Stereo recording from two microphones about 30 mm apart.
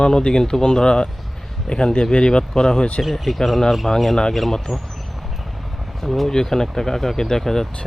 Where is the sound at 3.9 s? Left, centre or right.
Left.